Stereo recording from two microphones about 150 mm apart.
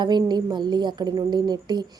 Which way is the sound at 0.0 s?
30° right (ahead or behind).